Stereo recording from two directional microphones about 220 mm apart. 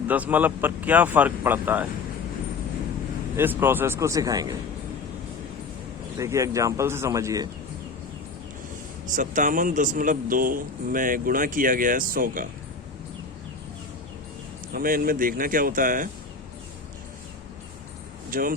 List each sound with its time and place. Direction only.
0.1 s speech: 5° right (ahead or behind)
3.3 s speech: 10° right (ahead or behind)
6.1 s speech: 15° right (ahead or behind)
9.0 s a man's voice: 35° right (ahead or behind)
14.7 s a man's voice: 40° right (ahead or behind)
18.3 s speech: 40° right (ahead or behind)